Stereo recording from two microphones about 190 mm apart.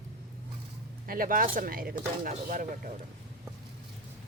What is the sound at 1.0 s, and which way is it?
Speech, 50° right (ahead or behind).